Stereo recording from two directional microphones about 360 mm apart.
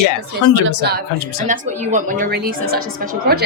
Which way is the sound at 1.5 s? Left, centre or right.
Centre.